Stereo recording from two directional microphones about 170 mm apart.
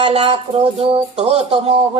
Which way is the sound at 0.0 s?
35° right (ahead or behind).